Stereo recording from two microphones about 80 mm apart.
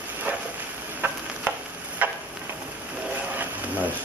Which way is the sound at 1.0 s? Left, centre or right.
Right.